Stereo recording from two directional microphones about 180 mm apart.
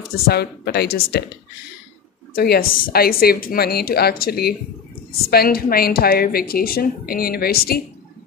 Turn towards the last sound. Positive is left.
turn(degrees=55)  # may be behind; listen again after turning